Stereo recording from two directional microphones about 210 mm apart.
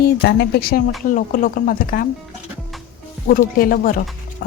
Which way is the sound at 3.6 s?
45° left (ahead or behind).